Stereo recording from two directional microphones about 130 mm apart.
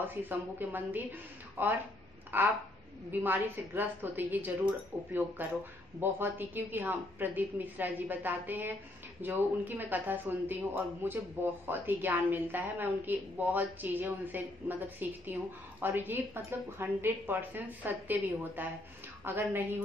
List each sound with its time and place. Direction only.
0.0 s a woman's voice: 15° right (ahead or behind)